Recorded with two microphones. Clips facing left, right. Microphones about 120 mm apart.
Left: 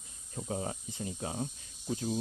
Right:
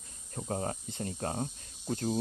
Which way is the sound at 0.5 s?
50° right (ahead or behind).